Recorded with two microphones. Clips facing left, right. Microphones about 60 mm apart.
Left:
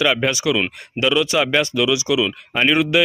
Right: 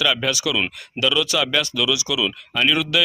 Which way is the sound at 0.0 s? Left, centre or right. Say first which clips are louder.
Left 3 dB; left.